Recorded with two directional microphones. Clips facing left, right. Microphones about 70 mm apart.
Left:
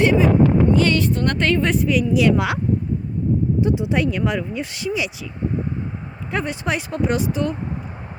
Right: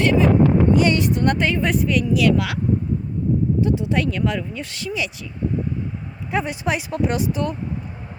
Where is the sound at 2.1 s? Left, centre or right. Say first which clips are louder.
Left 2 dB; left.